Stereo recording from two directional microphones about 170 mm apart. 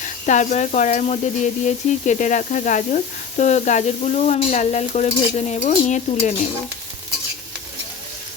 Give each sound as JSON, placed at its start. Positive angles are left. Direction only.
{"t": 0.3, "sound": "speech", "side_deg": 45}